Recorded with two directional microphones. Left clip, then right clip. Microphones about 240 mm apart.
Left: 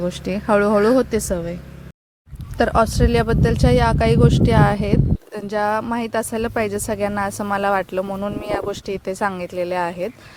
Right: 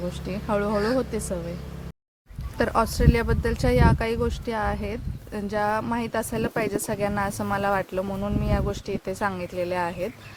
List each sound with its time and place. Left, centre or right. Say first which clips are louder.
0.0 s speech: left 8 dB; left
2.6 s speech: left 6 dB; centre